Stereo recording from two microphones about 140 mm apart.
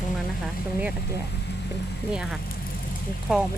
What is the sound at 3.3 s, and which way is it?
Speech, 5° right (ahead or behind).